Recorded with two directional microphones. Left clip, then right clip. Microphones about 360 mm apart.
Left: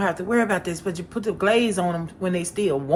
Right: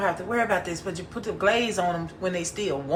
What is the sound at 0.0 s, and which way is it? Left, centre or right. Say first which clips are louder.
Speech: left 3 dB; left.